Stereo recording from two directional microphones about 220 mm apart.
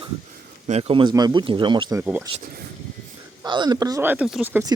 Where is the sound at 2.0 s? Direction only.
10° right (ahead or behind).